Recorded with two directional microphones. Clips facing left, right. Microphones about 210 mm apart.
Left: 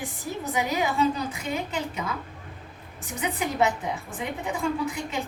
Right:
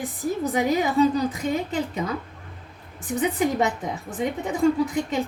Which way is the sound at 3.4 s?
40° right (ahead or behind).